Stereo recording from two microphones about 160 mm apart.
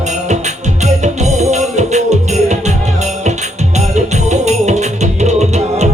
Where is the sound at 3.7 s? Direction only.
45° right (ahead or behind).